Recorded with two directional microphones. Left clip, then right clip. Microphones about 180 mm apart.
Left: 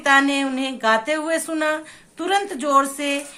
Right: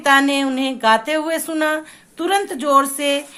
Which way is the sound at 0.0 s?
35° right (ahead or behind).